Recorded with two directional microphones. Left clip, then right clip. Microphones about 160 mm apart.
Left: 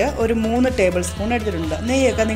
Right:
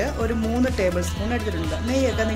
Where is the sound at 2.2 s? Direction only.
15° left (ahead or behind).